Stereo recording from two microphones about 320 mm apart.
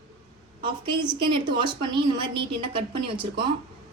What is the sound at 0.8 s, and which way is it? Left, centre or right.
A woman's voice, centre.